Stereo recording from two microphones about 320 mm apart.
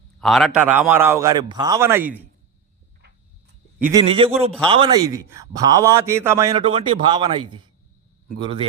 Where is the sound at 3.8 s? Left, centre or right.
Centre.